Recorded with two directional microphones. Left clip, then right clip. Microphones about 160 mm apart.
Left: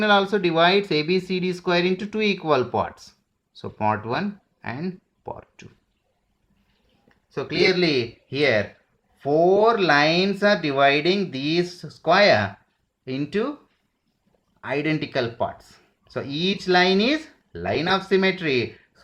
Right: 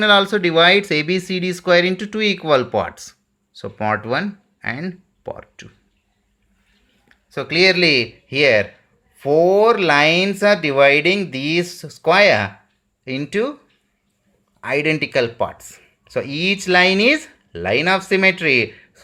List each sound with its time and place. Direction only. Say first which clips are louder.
0.0 s speech: right 5 dB; 15° right (ahead or behind)
7.1 s speech: right 6 dB; 20° right (ahead or behind)
14.6 s speech: right 6 dB; 15° right (ahead or behind)